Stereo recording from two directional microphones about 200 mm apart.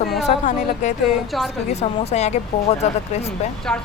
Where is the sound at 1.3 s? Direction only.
Centre (ahead or behind).